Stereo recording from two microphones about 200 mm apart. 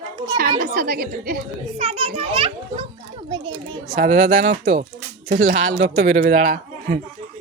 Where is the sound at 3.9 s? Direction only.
40° right (ahead or behind).